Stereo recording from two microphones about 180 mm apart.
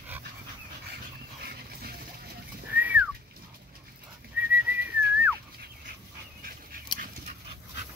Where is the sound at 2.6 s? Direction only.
10° right (ahead or behind).